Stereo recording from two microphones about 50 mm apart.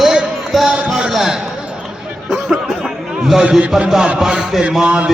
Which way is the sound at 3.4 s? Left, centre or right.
Centre.